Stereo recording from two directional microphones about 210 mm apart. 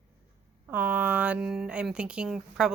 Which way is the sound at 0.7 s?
10° right (ahead or behind).